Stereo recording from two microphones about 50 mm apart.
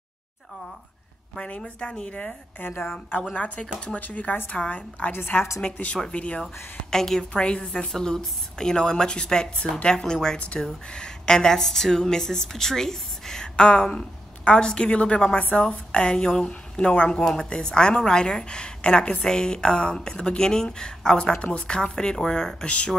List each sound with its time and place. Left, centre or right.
1.3 s a woman's voice: left
2.6 s a woman's voice: left
6.4 s a woman's voice: centre
22.7 s a woman's voice: left